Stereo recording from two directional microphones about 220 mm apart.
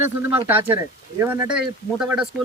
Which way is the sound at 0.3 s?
10° right (ahead or behind).